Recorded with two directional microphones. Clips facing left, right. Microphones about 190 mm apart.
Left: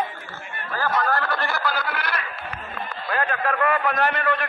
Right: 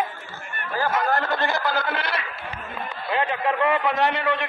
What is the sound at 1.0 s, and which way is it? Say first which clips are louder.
A man's voice: right 2 dB; 20° right (ahead or behind).